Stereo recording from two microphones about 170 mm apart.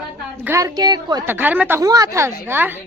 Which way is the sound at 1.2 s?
10° right (ahead or behind).